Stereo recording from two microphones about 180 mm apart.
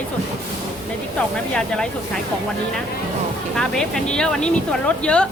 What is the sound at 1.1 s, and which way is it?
Speech, 5° left (ahead or behind).